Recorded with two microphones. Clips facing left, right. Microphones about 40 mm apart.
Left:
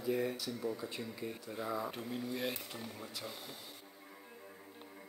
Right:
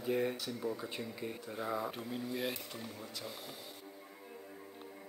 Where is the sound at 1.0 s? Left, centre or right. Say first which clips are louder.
Right 1 dB; centre.